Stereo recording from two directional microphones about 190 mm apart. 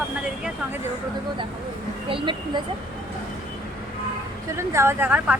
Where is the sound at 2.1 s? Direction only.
25° right (ahead or behind).